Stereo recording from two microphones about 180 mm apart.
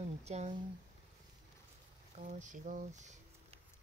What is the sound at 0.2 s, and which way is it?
Speech, 35° right (ahead or behind).